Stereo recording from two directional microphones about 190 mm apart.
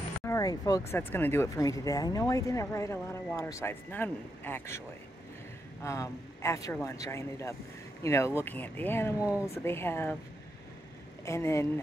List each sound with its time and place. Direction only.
0.2 s vehicle: 15° left (ahead or behind)
0.9 s speech: 10° left (ahead or behind)
9.2 s speech: 5° right (ahead or behind)
9.5 s speech: 10° left (ahead or behind)
11.2 s speech: 15° left (ahead or behind)